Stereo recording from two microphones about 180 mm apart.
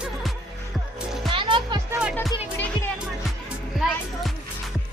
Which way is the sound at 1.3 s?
25° right (ahead or behind).